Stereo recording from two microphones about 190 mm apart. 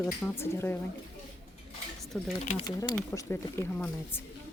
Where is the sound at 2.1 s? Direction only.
Centre (ahead or behind).